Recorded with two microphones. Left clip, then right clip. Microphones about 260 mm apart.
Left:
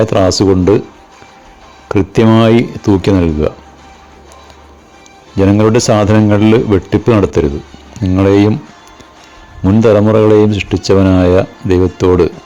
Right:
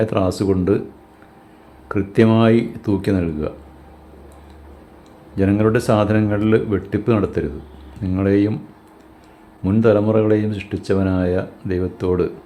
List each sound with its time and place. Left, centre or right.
0.0 s speech: left
1.9 s speech: left
5.4 s speech: left
9.8 s speech: left